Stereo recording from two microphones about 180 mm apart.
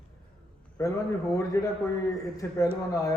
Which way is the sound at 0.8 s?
20° left (ahead or behind).